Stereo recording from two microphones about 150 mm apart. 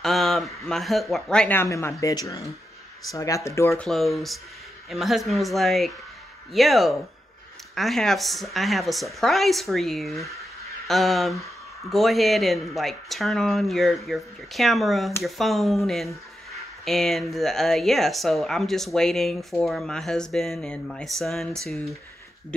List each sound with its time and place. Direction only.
0.0 s speech: centre (ahead or behind); by 3.8 s 20° left (ahead or behind)
3.8 s speech: centre (ahead or behind)